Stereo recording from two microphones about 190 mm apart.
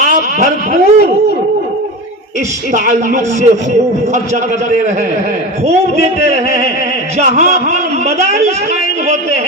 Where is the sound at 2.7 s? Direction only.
40° right (ahead or behind).